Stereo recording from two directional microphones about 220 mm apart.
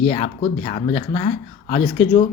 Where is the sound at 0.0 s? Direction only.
25° left (ahead or behind).